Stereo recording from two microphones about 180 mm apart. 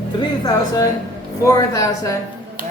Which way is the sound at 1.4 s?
15° left (ahead or behind).